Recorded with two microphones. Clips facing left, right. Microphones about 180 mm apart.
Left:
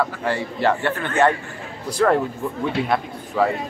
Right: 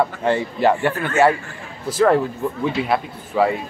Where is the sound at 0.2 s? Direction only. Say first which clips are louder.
Right 4 dB; 20° right (ahead or behind).